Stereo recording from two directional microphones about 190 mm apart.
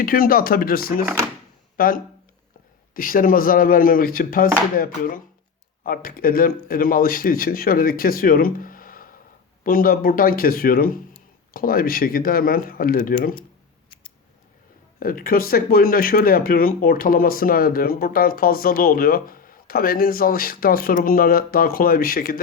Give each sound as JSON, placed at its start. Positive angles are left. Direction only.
{"t": 0.0, "sound": "speech", "side_deg": 50}
{"t": 14.9, "sound": "speech", "side_deg": 50}